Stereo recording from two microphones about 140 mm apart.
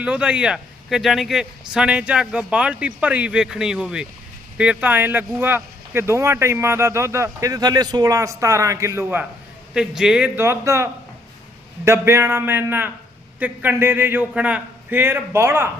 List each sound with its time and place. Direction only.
0.0 s a man's voice: 10° right (ahead or behind)
9.7 s a man's voice: 5° right (ahead or behind)
10.3 s speech: 20° right (ahead or behind)
11.9 s a man's voice: 20° right (ahead or behind)